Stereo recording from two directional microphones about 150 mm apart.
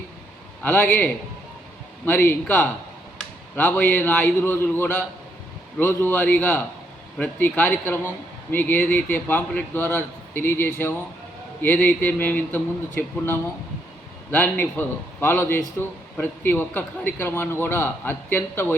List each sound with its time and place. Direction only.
0.6 s a man's voice: 15° left (ahead or behind)